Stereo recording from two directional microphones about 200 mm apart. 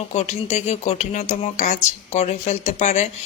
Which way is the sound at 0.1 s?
35° left (ahead or behind).